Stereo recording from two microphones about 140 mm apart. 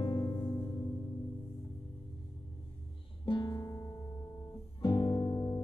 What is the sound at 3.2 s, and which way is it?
Music, 30° left (ahead or behind).